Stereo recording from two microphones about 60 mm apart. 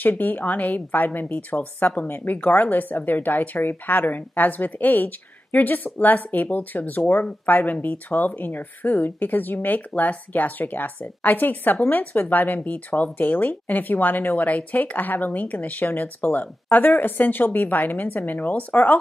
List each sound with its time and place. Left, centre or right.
0.0 s speech: left